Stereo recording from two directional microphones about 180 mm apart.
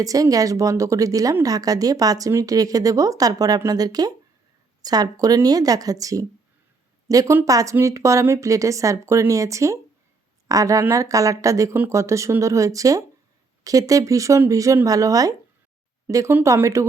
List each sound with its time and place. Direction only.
0.0 s a woman's voice: 20° right (ahead or behind)